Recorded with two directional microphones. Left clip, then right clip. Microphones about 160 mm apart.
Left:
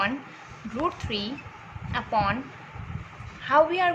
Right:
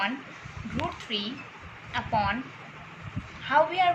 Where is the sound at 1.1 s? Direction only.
50° left (ahead or behind).